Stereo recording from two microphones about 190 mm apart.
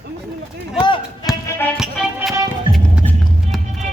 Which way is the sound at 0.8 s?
25° left (ahead or behind).